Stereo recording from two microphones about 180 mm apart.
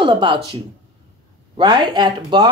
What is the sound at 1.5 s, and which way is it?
Speech, 25° right (ahead or behind).